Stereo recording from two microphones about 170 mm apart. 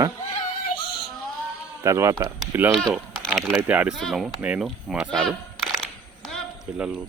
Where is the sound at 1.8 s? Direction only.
15° right (ahead or behind).